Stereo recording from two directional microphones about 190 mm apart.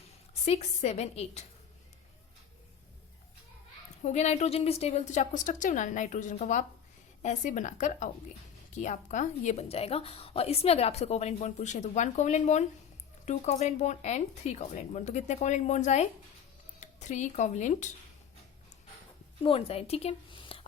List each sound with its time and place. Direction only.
0.4 s a woman's voice: 35° left (ahead or behind)
4.0 s a woman's voice: 35° left (ahead or behind)
19.4 s a woman's voice: 30° left (ahead or behind)